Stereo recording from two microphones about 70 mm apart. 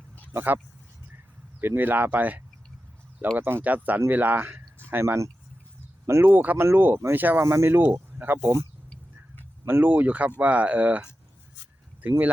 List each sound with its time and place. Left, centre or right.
0.3 s speech: right
1.6 s speech: right
6.1 s speech: right
6.3 s speech: right
7.4 s speech: right
9.6 s speech: right